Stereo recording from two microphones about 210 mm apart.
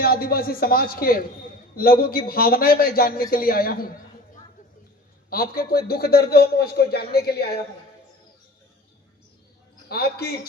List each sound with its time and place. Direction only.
0.0 s speech: 45° left (ahead or behind)
5.3 s speech: 45° left (ahead or behind)
9.9 s speech: 50° left (ahead or behind)